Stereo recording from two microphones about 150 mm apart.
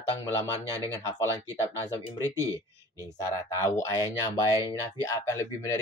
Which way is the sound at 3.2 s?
20° left (ahead or behind).